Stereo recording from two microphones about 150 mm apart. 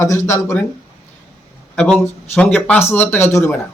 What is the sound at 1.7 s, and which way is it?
Speech, 5° left (ahead or behind).